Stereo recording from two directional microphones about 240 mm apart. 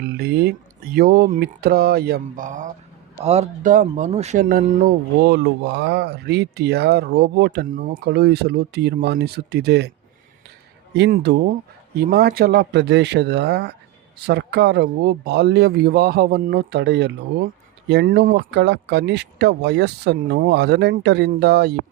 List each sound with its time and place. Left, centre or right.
0.2 s speech: right
10.9 s speech: right